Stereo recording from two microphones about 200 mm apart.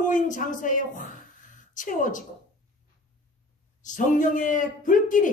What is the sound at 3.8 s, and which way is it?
A woman's voice, 40° left (ahead or behind).